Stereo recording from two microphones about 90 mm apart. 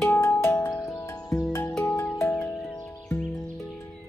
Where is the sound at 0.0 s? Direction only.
25° left (ahead or behind).